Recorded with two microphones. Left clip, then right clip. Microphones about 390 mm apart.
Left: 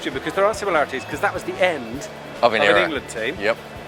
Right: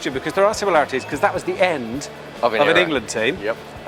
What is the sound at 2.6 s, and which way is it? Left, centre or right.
Speech, right.